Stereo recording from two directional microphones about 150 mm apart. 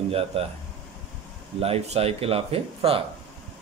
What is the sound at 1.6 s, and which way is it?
Speech, 40° right (ahead or behind).